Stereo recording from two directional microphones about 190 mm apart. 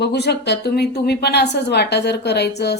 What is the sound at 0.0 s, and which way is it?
Speech, 60° left (ahead or behind).